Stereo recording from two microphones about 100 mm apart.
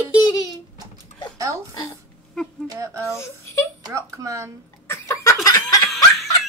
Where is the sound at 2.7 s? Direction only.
30° right (ahead or behind).